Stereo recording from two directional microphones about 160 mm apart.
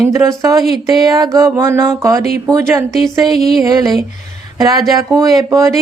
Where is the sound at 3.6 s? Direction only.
20° right (ahead or behind).